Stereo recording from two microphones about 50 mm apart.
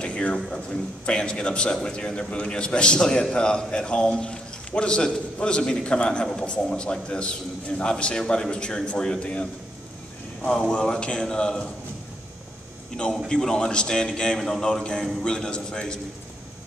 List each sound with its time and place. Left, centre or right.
0.0 s a sound: left
0.5 s a man's voice: centre
10.4 s a man's voice: centre
13.3 s a man's voice: centre